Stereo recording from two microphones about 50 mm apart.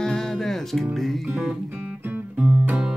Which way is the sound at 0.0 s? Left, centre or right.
Centre.